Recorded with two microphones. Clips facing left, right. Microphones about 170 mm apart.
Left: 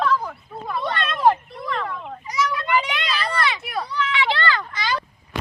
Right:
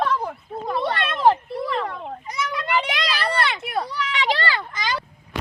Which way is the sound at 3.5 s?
50° right (ahead or behind).